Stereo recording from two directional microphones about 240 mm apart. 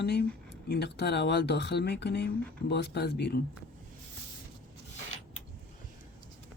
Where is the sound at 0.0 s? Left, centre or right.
Left.